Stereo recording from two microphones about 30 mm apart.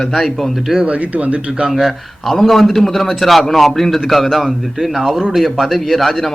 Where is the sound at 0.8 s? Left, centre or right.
Right.